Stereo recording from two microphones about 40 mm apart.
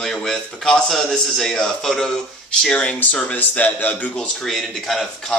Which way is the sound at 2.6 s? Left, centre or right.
Left.